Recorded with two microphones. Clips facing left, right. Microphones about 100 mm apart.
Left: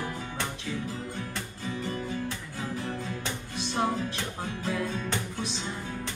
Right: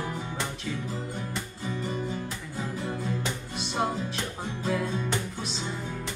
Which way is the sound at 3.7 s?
5° right (ahead or behind).